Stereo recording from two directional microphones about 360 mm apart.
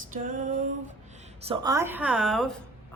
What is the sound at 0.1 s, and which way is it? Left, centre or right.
Female singing, right.